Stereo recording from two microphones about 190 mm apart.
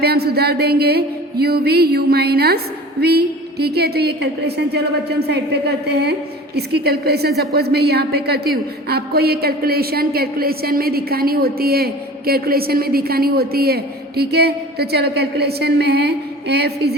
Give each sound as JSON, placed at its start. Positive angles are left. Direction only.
{"t": 0.0, "sound": "a woman's voice", "side_deg": -55}